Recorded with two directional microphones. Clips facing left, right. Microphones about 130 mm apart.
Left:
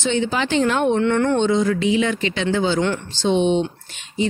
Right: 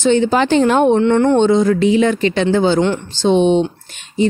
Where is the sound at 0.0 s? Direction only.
45° right (ahead or behind).